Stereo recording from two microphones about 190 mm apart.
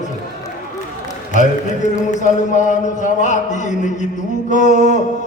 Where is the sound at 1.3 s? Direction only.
40° left (ahead or behind).